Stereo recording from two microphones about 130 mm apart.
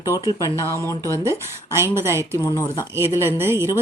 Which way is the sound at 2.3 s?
25° left (ahead or behind).